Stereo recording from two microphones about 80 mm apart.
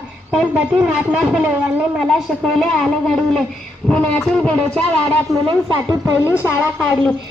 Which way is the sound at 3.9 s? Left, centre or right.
Centre.